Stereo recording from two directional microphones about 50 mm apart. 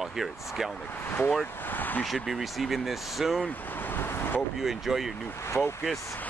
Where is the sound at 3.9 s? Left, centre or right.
Left.